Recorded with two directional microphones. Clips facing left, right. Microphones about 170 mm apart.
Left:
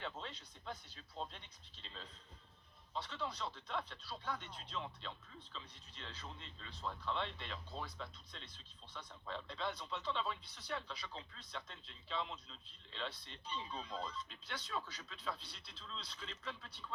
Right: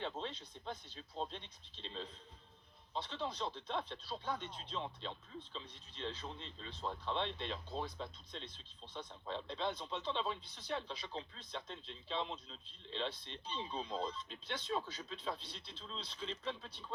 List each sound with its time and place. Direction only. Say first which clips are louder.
0.0 s speech: right 5 dB; 25° right (ahead or behind)